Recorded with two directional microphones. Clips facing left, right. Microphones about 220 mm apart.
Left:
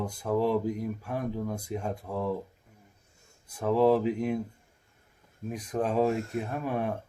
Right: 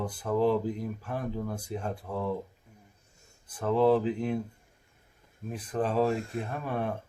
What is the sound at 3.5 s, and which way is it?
Speech, 5° left (ahead or behind).